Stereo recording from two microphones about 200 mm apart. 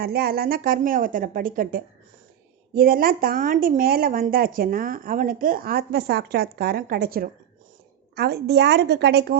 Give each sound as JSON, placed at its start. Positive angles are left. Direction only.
{"t": 0.0, "sound": "a woman's voice", "side_deg": -50}